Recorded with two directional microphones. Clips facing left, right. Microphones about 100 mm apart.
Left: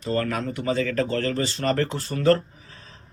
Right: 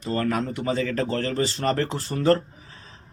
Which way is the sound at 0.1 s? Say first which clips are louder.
Even; 25° right (ahead or behind).